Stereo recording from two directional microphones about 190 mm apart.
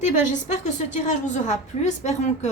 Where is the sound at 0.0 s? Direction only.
40° left (ahead or behind).